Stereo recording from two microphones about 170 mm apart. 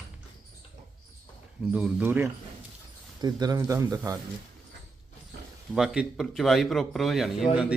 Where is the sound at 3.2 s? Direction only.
25° right (ahead or behind).